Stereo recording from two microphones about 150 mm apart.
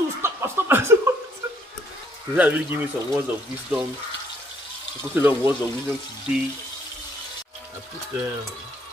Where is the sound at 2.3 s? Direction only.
10° right (ahead or behind).